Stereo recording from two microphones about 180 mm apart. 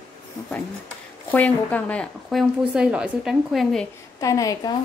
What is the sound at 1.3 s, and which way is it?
A woman's voice, 10° left (ahead or behind).